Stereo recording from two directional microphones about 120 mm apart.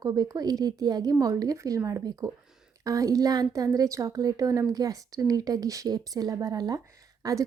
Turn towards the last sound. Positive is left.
turn(degrees=-30)  # may be behind; listen again after turning